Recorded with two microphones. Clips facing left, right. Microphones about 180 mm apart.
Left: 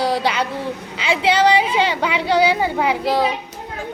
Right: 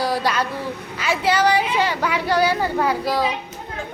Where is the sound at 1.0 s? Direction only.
25° left (ahead or behind).